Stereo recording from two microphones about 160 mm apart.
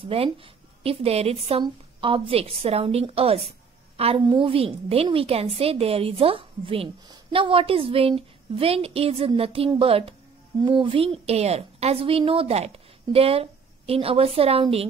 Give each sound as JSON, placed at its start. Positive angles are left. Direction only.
{"t": 0.0, "sound": "a woman's voice", "side_deg": -35}
{"t": 3.9, "sound": "a sound", "side_deg": -40}
{"t": 4.3, "sound": "a woman's voice", "side_deg": -35}